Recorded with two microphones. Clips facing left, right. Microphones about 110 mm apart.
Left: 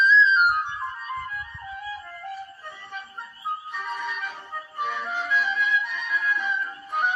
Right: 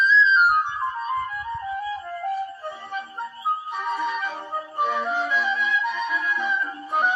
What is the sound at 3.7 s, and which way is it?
Music, 35° right (ahead or behind).